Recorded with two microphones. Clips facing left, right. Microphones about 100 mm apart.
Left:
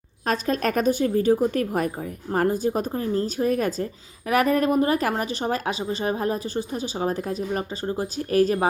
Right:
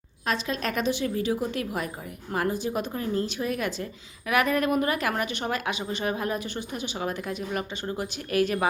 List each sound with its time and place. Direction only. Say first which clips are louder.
0.3 s a woman's voice: left 5 dB; 45° left (ahead or behind)